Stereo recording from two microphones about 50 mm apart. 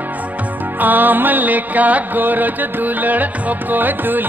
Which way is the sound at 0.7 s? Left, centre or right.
Right.